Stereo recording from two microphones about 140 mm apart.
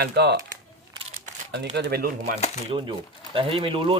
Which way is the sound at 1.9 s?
90° right.